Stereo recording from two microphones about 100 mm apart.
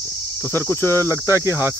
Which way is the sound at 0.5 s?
25° left (ahead or behind).